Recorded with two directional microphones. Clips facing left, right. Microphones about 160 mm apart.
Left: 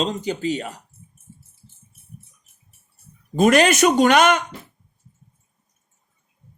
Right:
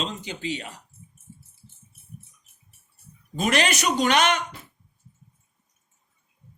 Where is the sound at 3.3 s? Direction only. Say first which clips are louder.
Left 8 dB; 45° left (ahead or behind).